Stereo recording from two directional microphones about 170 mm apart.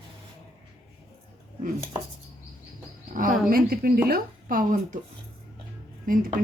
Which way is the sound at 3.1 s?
55° right (ahead or behind).